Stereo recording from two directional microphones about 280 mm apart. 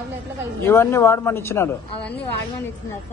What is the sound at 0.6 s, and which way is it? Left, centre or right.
Speech, centre.